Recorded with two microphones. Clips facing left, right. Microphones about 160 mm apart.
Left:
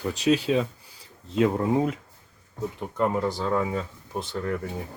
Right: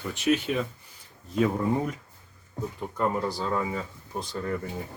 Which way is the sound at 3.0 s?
20° left (ahead or behind).